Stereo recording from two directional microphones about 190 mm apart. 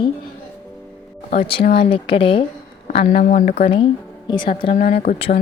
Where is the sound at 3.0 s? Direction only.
45° left (ahead or behind).